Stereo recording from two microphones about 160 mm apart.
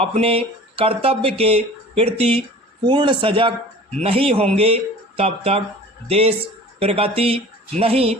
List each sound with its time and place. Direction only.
0.0 s speech: 40° right (ahead or behind)